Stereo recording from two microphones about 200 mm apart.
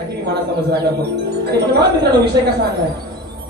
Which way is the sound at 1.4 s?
55° right (ahead or behind).